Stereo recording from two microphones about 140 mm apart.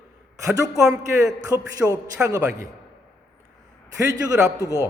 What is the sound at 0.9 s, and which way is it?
Speech, 25° right (ahead or behind).